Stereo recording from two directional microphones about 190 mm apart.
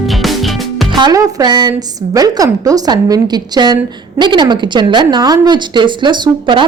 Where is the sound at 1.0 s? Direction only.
20° right (ahead or behind).